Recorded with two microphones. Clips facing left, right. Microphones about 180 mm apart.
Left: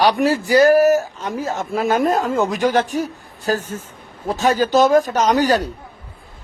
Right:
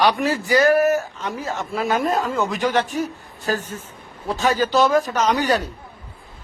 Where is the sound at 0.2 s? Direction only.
Centre (ahead or behind).